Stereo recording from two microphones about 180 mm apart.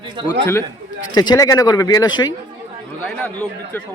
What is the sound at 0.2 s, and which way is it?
Speech, 25° right (ahead or behind).